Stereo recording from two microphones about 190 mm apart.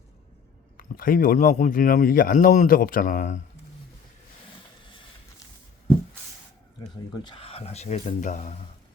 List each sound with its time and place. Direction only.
0.8 s speech: 50° left (ahead or behind)
7.1 s speech: 25° left (ahead or behind)